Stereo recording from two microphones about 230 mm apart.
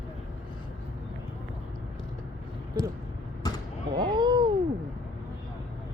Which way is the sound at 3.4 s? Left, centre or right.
Centre.